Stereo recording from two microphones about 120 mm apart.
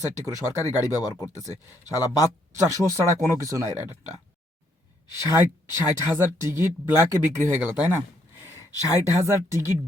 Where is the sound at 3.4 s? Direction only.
25° right (ahead or behind).